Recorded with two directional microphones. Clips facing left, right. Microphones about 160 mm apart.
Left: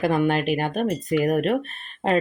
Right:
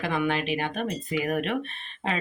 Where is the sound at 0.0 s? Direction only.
45° left (ahead or behind).